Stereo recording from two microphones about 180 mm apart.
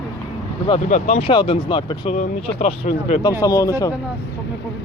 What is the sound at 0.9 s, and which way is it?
Speech, 35° left (ahead or behind).